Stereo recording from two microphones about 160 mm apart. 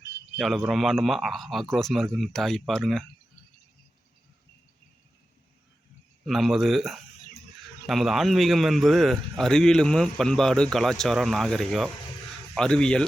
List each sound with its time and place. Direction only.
0.3 s a man's voice: centre (ahead or behind)
6.2 s a man's voice: centre (ahead or behind)